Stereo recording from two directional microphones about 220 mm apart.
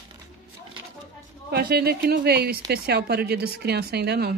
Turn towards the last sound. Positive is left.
turn(degrees=-45)  # may be behind; listen again after turning